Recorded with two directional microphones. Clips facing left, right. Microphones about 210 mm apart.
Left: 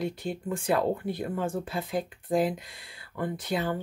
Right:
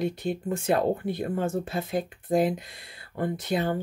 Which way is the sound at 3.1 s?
30° right (ahead or behind).